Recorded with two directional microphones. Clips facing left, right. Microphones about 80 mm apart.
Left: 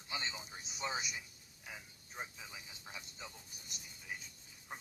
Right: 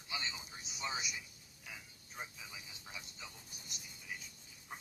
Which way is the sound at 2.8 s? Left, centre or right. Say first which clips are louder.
Left 1 dB; left.